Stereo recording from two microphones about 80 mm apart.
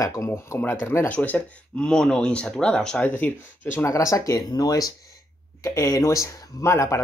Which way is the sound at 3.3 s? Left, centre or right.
Left.